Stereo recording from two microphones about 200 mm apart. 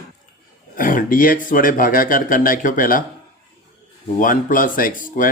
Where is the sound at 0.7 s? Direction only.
40° left (ahead or behind).